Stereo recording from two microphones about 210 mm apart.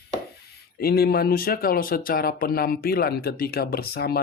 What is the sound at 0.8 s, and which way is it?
Speech, 50° left (ahead or behind).